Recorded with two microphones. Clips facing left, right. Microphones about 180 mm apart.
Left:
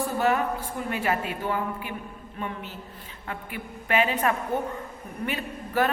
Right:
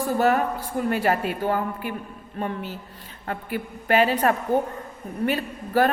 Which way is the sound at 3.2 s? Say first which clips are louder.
Right 6 dB; 40° right (ahead or behind).